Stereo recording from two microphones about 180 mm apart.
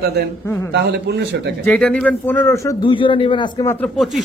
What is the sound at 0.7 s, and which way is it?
Speech, 70° right (ahead or behind).